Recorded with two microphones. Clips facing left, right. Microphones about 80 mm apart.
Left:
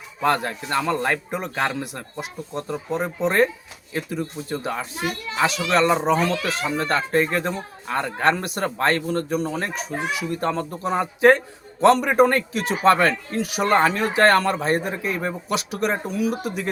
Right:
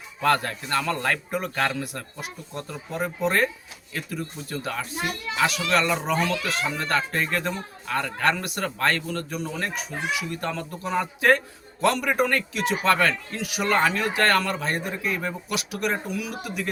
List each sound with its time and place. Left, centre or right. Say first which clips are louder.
0.2 s a man's voice: left 1 dB; centre; by 16.6 s left